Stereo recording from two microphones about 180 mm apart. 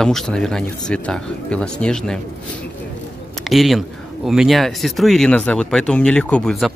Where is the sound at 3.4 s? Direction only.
Centre (ahead or behind).